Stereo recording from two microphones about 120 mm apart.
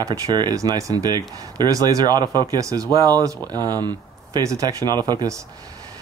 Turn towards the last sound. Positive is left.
turn(degrees=-35)  # may be behind; listen again after turning